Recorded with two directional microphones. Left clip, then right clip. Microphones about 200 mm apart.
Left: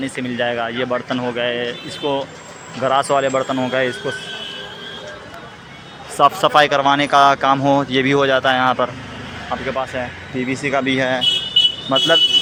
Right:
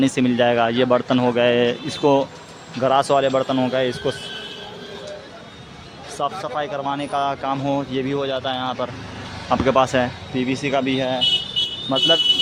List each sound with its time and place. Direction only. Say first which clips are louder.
0.0 s speech: right 4 dB; 30° right (ahead or behind)
2.8 s speech: left 1 dB; 20° right (ahead or behind)
6.2 s speech: left 12 dB; 5° left (ahead or behind)
9.6 s speech: right 7 dB; 35° right (ahead or behind)
10.3 s speech: left 2 dB; 15° right (ahead or behind)